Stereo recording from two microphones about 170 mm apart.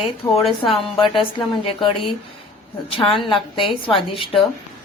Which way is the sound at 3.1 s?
30° left (ahead or behind).